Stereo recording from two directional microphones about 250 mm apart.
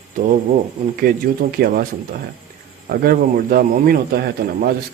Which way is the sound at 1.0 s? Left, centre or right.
Right.